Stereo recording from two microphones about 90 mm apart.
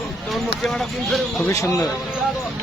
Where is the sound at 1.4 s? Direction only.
35° left (ahead or behind).